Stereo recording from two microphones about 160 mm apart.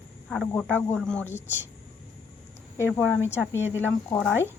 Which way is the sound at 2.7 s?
15° left (ahead or behind).